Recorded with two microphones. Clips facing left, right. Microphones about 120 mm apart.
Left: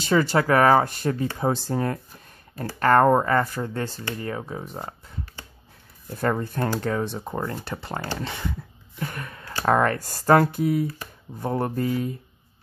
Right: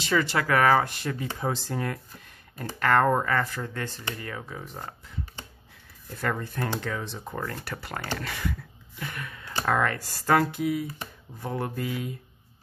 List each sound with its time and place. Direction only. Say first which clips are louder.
0.0 s speech: left 5 dB; 35° left (ahead or behind)
6.0 s speech: left 5 dB; 40° left (ahead or behind)
7.3 s speech: left 2 dB; 25° left (ahead or behind)
8.9 s gasp: left 4 dB; 40° left (ahead or behind)
9.7 s speech: left 5 dB; 40° left (ahead or behind)